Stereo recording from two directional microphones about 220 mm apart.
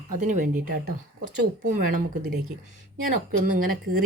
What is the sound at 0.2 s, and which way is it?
Speech, 35° right (ahead or behind).